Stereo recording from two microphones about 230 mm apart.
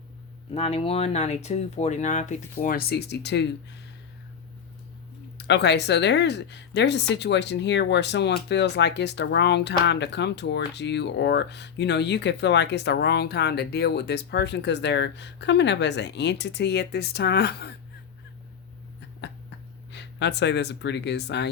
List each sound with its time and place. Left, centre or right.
0.5 s speech: left
5.5 s speech: left
19.2 s a sound: left